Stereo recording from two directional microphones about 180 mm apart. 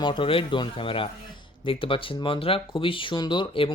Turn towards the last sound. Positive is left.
turn(degrees=25)  # may be behind; listen again after turning